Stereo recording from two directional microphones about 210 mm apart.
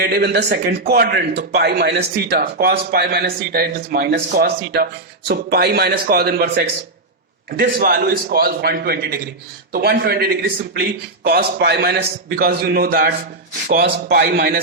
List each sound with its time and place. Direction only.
0.0 s speech: 50° right (ahead or behind)